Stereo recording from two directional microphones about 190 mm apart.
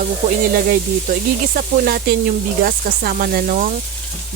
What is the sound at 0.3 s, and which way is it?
Speech, 45° right (ahead or behind).